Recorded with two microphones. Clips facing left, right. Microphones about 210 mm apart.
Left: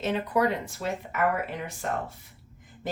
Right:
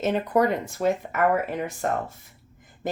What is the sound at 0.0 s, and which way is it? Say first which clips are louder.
Speech: right 4 dB; 45° right (ahead or behind).